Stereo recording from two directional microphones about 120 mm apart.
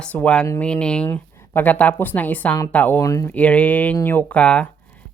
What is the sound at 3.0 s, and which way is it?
Speech, 25° left (ahead or behind).